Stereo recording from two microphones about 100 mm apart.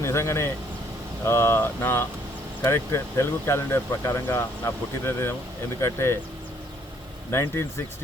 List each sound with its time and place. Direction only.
0.0 s speech: 30° left (ahead or behind)
7.3 s speech: 25° left (ahead or behind)